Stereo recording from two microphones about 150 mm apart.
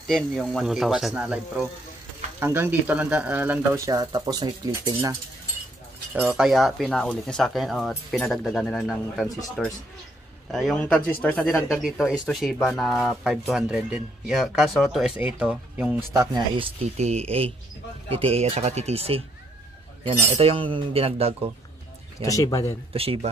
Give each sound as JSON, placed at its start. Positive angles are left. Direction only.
{"t": 0.0, "sound": "speech", "side_deg": 0}
{"t": 3.8, "sound": "speech", "side_deg": -25}
{"t": 6.1, "sound": "speech", "side_deg": -5}
{"t": 16.1, "sound": "speech", "side_deg": -25}
{"t": 16.5, "sound": "speech", "side_deg": -45}
{"t": 22.2, "sound": "speech", "side_deg": 20}
{"t": 22.9, "sound": "speech", "side_deg": -40}